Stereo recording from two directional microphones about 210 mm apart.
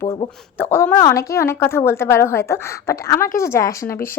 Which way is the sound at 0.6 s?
10° left (ahead or behind).